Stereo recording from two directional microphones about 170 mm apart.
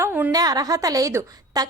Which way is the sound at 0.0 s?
10° right (ahead or behind).